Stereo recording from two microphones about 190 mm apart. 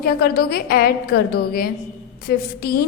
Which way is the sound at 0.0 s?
55° left (ahead or behind).